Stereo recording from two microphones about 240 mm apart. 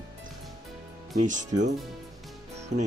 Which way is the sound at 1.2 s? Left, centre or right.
Right.